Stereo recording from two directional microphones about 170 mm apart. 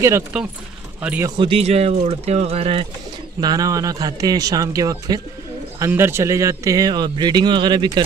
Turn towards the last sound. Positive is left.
turn(degrees=-25)  # may be behind; listen again after turning